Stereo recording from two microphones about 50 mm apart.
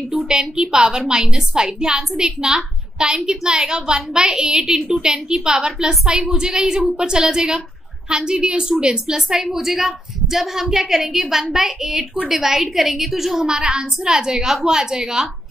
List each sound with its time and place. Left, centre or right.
0.1 s a woman's voice: centre
6.8 s a woman's voice: centre
7.1 s a woman's voice: centre